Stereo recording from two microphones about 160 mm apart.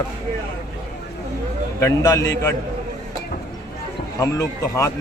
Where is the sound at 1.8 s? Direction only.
20° left (ahead or behind).